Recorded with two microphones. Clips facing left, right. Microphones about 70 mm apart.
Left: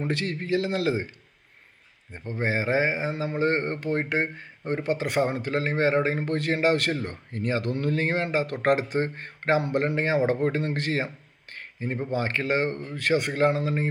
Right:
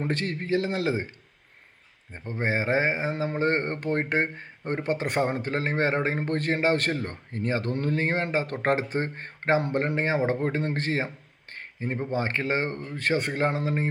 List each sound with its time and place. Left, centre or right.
0.0 s a man's voice: right
2.1 s a man's voice: right
3.2 s a man's voice: right
12.1 s a man's voice: right